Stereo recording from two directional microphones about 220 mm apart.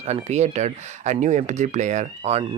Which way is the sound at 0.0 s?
30° right (ahead or behind).